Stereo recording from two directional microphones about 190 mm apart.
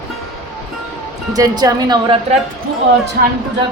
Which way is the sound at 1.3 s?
20° right (ahead or behind).